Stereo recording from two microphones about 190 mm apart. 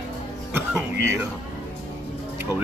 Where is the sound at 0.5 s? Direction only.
10° right (ahead or behind).